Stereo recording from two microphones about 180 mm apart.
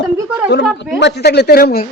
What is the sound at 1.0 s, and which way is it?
Speech, 65° left (ahead or behind).